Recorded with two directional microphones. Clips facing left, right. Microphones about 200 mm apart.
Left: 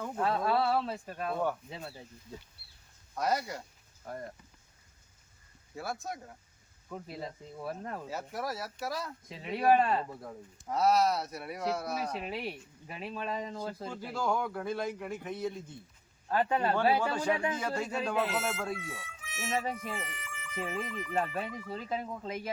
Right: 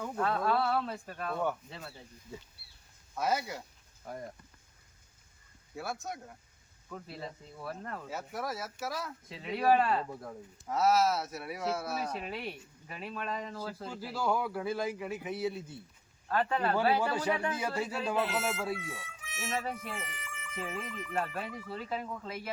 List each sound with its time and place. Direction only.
0.0 s speech: 10° left (ahead or behind)
3.2 s speech: centre (ahead or behind)
5.7 s speech: centre (ahead or behind)
7.6 s speech: 15° left (ahead or behind)
8.0 s speech: centre (ahead or behind); by 13.8 s 15° left (ahead or behind)
13.8 s speech: 5° right (ahead or behind)
16.3 s speech: 15° left (ahead or behind)
17.0 s a man's voice: 10° right (ahead or behind)